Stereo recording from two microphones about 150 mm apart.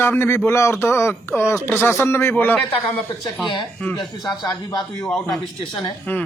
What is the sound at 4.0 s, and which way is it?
Speech, 30° left (ahead or behind).